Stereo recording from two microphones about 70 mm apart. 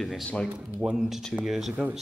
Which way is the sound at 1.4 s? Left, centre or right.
Centre.